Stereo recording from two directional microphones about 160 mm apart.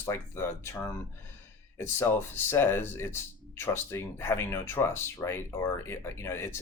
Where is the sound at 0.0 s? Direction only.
15° left (ahead or behind).